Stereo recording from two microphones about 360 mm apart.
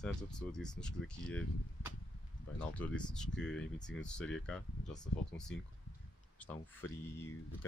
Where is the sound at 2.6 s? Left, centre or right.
Centre.